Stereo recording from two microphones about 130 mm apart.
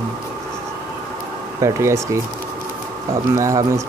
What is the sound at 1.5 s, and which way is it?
Speech, 25° right (ahead or behind).